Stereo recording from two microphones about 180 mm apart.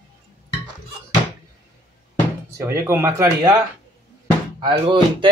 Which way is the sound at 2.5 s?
15° right (ahead or behind).